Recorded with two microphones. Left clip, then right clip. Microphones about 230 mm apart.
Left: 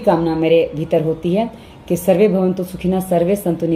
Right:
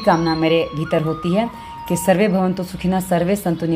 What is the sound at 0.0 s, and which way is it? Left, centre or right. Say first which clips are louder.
Speech: left 1 dB; right.